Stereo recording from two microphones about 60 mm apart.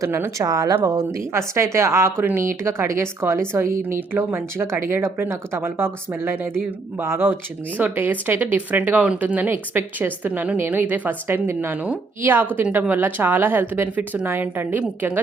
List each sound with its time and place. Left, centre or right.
0.0 s a woman's voice: right
0.4 s speech: right
0.9 s a woman's voice: right
7.0 s speech: right
12.2 s speech: right